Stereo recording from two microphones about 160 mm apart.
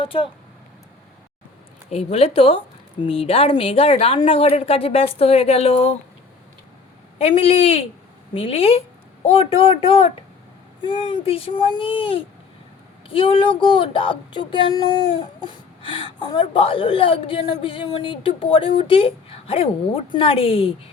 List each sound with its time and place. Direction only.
0.0 s speech: 35° left (ahead or behind)
1.9 s speech: 40° left (ahead or behind)
7.2 s speech: 35° left (ahead or behind)